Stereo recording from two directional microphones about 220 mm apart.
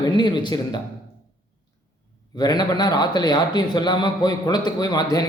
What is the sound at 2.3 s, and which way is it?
Speech, 15° left (ahead or behind).